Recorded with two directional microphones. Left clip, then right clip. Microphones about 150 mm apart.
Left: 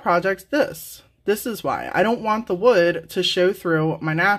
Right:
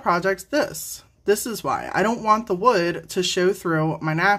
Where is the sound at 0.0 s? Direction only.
10° left (ahead or behind).